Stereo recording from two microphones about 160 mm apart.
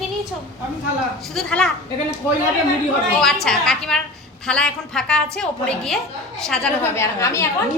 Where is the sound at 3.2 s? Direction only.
5° left (ahead or behind).